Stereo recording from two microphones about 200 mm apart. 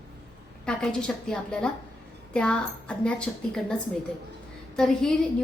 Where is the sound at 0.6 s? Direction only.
5° left (ahead or behind).